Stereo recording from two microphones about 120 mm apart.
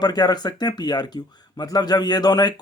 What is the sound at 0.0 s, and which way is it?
Speech, 35° left (ahead or behind).